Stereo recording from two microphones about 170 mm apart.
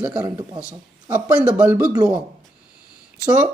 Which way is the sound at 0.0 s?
10° right (ahead or behind).